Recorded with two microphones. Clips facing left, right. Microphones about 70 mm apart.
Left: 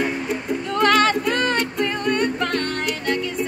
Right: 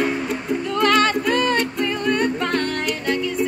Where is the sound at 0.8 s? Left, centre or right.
Left.